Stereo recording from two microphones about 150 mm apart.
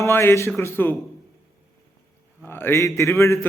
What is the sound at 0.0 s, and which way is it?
Speech, 15° left (ahead or behind).